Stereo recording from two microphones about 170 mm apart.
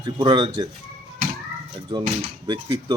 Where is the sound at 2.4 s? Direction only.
25° right (ahead or behind).